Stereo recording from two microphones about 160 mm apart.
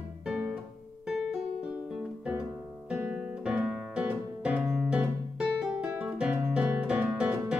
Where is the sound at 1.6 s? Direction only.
5° right (ahead or behind).